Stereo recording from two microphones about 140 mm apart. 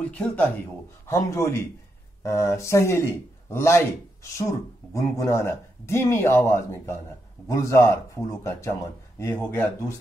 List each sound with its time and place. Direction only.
0.0 s speech: 10° left (ahead or behind)
1.0 s speech: 20° left (ahead or behind)